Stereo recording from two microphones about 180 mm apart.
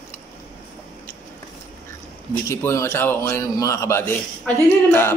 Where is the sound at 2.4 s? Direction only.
15° left (ahead or behind).